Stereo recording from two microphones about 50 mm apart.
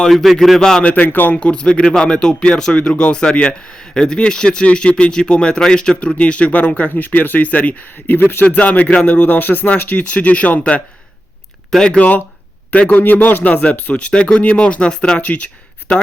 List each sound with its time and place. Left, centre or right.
0.1 s speech: centre
0.6 s speech: centre
0.9 s speech: left
1.4 s speech: left
8.4 s speech: left